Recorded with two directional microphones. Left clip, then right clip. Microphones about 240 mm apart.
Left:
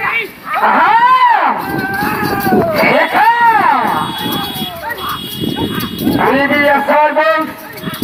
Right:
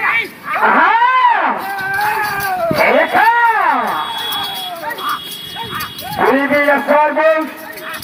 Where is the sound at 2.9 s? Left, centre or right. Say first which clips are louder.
Left 1 dB; left.